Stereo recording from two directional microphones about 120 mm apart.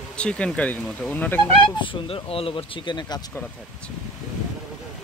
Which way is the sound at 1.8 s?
45° left (ahead or behind).